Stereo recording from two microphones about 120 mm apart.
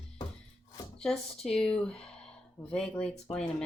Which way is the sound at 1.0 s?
5° left (ahead or behind).